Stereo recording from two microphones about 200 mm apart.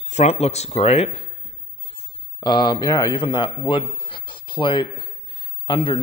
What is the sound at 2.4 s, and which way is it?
A man's voice, 20° left (ahead or behind).